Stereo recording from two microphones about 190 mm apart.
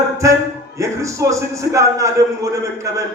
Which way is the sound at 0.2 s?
15° right (ahead or behind).